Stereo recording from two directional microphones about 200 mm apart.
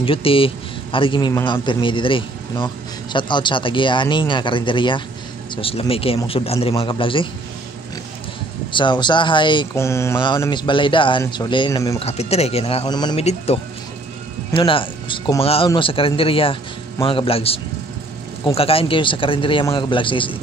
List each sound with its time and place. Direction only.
0.0 s a man's voice: 25° left (ahead or behind)
8.7 s a man's voice: 25° left (ahead or behind)
12.0 s speech: 30° left (ahead or behind)
13.1 s a man's voice: 30° left (ahead or behind)